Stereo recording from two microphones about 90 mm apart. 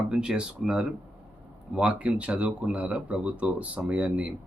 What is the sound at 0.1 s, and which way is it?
Speech, 10° right (ahead or behind).